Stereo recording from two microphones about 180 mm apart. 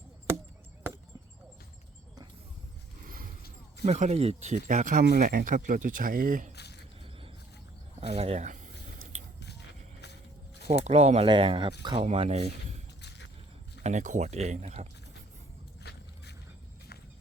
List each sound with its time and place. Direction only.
3.8 s speech: 35° right (ahead or behind)
8.0 s a sound: 35° right (ahead or behind)
10.8 s speech: 35° right (ahead or behind)
13.0 s a sound: 75° left (ahead or behind)
13.8 s speech: 40° right (ahead or behind)
15.8 s vehicle: 65° left (ahead or behind)